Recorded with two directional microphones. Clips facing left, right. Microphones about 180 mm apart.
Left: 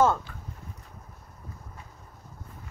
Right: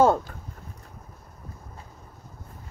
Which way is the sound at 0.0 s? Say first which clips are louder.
Right 4 dB; 35° right (ahead or behind).